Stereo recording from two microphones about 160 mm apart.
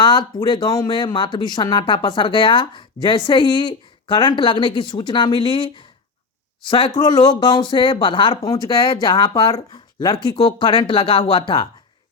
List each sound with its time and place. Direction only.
0.0 s speech: 25° left (ahead or behind)